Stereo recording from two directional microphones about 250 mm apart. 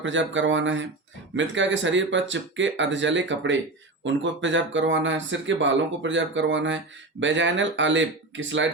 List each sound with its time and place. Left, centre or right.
0.0 s speech: right